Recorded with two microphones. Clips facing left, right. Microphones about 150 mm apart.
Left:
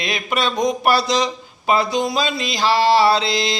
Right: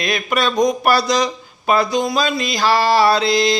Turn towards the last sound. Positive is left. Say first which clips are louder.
# right 3 dB
turn(degrees=25)  # may be behind; listen again after turning